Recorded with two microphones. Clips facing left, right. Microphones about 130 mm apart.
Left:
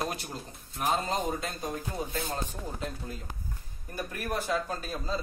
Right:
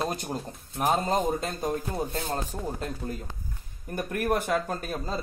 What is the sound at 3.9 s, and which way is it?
Speech, 55° right (ahead or behind).